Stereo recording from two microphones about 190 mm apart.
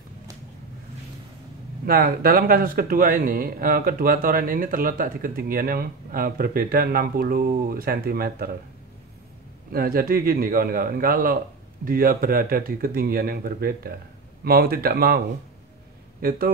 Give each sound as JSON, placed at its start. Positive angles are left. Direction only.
{"t": 1.9, "sound": "speech", "side_deg": -55}
{"t": 9.7, "sound": "speech", "side_deg": -50}